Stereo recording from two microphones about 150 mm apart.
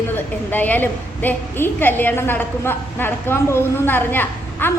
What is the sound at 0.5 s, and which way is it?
A woman's voice, 10° left (ahead or behind).